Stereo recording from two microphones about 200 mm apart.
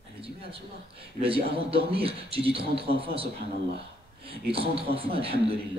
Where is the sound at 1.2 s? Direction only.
30° right (ahead or behind).